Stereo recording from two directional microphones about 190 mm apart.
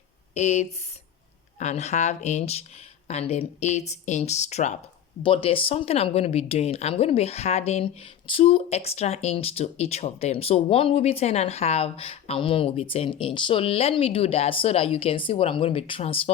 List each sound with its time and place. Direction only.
0.3 s speech: 35° left (ahead or behind)